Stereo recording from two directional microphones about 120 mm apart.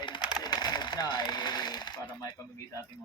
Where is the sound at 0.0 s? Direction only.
40° left (ahead or behind).